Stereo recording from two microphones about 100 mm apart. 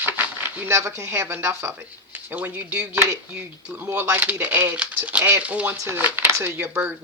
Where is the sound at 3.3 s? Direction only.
10° right (ahead or behind).